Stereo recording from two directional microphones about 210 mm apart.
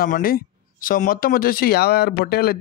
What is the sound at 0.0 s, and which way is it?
Speech, 45° left (ahead or behind).